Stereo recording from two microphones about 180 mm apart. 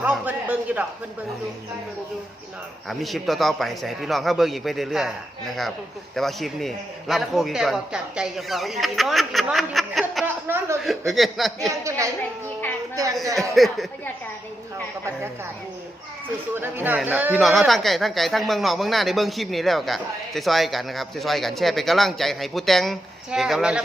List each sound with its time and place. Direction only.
0.0 s a man's voice: 10° right (ahead or behind)
3.0 s speech: centre (ahead or behind)
10.2 s chuckle: 10° right (ahead or behind)
10.8 s speech: centre (ahead or behind)
11.8 s a woman's voice: 15° right (ahead or behind)
13.2 s a woman's voice: 15° right (ahead or behind)
16.6 s speech: 10° right (ahead or behind)